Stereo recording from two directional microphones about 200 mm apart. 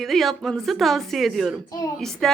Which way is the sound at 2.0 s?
Centre (ahead or behind).